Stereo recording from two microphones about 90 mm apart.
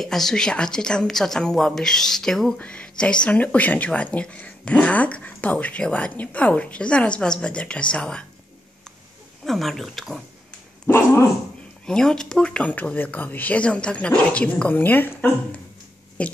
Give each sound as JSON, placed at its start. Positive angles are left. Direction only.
{"t": 0.0, "sound": "a woman's voice", "side_deg": 5}
{"t": 9.4, "sound": "a woman's voice", "side_deg": 0}
{"t": 11.8, "sound": "speech", "side_deg": 10}
{"t": 16.2, "sound": "speech", "side_deg": 15}